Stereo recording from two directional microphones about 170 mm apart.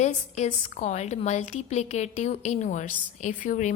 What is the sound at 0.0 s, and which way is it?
A woman's voice, 40° left (ahead or behind).